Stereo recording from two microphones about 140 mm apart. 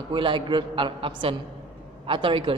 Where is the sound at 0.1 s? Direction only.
35° right (ahead or behind).